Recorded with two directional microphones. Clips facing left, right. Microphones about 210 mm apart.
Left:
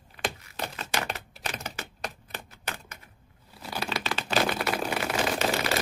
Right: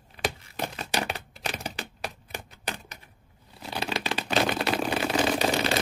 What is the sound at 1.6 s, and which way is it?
Typewriter, 15° right (ahead or behind).